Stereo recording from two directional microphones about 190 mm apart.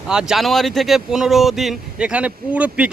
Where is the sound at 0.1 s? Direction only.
5° right (ahead or behind).